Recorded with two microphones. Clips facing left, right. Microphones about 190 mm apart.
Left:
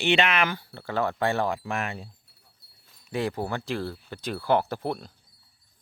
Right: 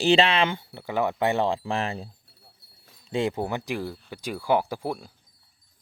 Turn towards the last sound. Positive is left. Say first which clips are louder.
# even
turn(degrees=-10)  # may be behind; listen again after turning